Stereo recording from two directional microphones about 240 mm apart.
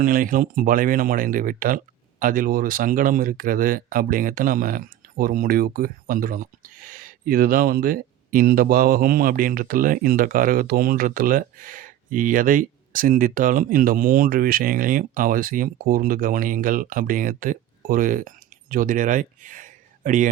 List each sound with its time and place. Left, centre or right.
0.0 s speech: right